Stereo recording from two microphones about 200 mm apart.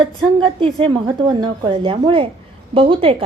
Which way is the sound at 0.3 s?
25° right (ahead or behind).